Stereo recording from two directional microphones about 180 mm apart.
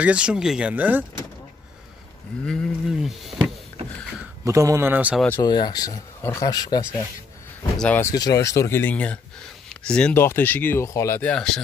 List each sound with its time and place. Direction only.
0.0 s speech: 5° right (ahead or behind)
2.4 s speech: 5° left (ahead or behind)
4.5 s a man's voice: 15° right (ahead or behind)
5.4 s speech: 25° left (ahead or behind)
7.7 s speech: 5° left (ahead or behind)
8.0 s speech: 20° left (ahead or behind); by 11.6 s 5° left (ahead or behind)